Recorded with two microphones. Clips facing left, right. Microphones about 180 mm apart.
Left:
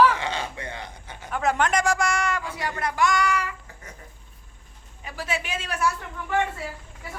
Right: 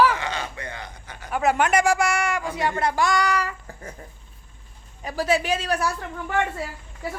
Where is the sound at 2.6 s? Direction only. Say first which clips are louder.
Right 3 dB; 25° right (ahead or behind).